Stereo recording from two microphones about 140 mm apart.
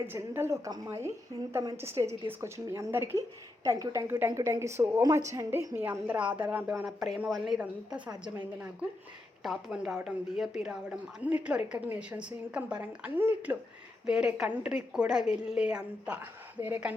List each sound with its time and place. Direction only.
0.1 s a woman's voice: 15° right (ahead or behind)
14.0 s a woman's voice: 5° right (ahead or behind)